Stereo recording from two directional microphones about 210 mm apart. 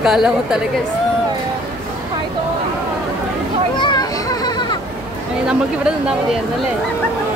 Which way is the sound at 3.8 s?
20° left (ahead or behind).